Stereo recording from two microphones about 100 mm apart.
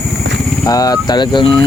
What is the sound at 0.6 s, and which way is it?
Speech, 40° left (ahead or behind).